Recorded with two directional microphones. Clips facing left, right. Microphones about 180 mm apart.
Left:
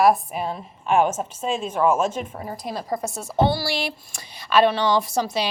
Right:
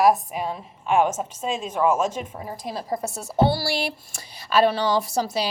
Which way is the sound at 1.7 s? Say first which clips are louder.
Left 1 dB; 15° right (ahead or behind).